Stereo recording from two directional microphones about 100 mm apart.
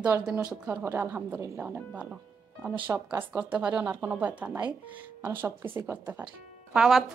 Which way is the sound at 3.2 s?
15° right (ahead or behind).